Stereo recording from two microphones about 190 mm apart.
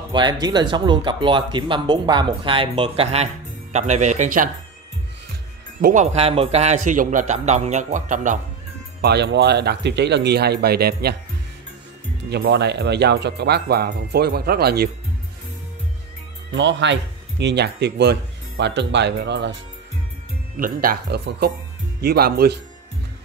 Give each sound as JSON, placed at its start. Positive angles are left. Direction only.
{"t": 0.1, "sound": "a man's voice", "side_deg": -25}
{"t": 5.8, "sound": "a man's voice", "side_deg": -40}
{"t": 9.0, "sound": "speech", "side_deg": -60}
{"t": 12.3, "sound": "speech", "side_deg": -60}
{"t": 16.5, "sound": "speech", "side_deg": -70}
{"t": 20.5, "sound": "speech", "side_deg": -50}